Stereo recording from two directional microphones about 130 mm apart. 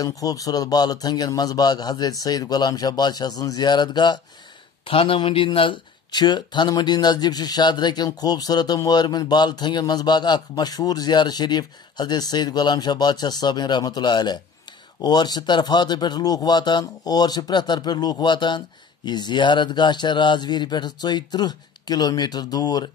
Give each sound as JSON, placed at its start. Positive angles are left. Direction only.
{"t": 0.0, "sound": "speech", "side_deg": 30}
{"t": 4.8, "sound": "speech", "side_deg": 45}